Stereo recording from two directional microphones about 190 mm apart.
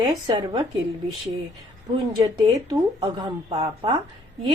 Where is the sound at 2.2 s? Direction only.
20° right (ahead or behind).